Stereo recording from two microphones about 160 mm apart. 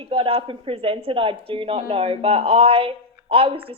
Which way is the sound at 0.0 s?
35° right (ahead or behind).